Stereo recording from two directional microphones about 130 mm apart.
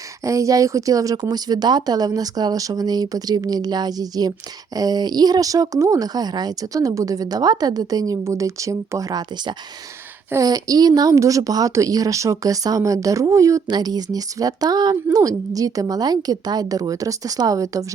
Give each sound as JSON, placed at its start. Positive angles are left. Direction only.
{"t": 0.3, "sound": "a woman's voice", "side_deg": -25}